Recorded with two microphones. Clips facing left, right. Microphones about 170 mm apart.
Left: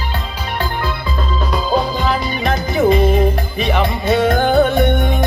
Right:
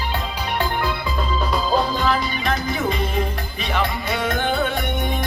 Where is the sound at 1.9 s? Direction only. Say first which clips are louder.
Left 2 dB; 20° left (ahead or behind); by 5.1 s 55° left (ahead or behind).